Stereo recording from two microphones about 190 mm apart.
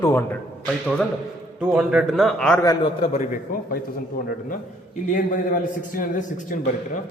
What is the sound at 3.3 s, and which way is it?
A man's voice, 45° left (ahead or behind).